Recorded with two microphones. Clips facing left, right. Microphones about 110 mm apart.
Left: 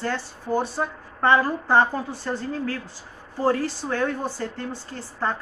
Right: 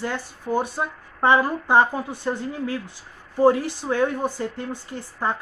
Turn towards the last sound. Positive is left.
turn(degrees=-15)  # may be behind; listen again after turning